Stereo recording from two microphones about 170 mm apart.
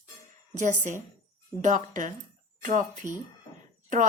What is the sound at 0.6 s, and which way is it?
A woman's voice, 45° right (ahead or behind).